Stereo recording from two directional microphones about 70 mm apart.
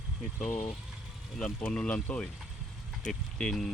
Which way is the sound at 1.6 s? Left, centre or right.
Centre.